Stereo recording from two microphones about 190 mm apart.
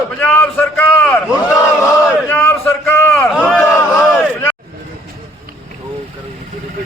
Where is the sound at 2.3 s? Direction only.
10° left (ahead or behind).